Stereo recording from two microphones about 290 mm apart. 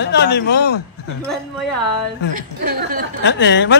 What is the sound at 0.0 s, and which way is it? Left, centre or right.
Speech, left.